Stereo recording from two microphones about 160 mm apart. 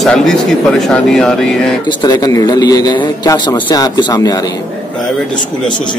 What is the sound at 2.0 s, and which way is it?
A man's voice, 25° left (ahead or behind).